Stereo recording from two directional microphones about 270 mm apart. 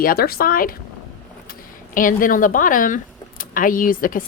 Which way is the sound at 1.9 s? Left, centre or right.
Left.